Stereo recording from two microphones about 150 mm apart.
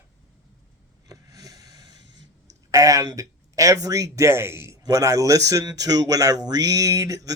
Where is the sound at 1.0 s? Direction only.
20° right (ahead or behind).